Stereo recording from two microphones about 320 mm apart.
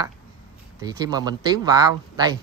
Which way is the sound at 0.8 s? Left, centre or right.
Centre.